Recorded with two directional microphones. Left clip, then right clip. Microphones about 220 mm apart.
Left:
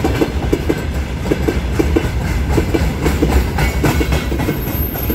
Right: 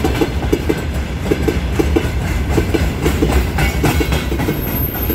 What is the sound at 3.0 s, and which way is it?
Train, 45° right (ahead or behind).